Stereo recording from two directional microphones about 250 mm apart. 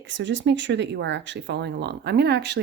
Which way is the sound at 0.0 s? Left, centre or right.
Right.